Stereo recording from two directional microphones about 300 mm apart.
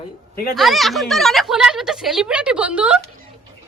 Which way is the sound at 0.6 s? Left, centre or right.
Centre.